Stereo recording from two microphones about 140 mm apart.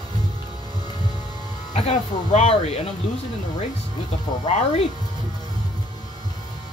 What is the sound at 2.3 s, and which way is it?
Speech, 50° left (ahead or behind).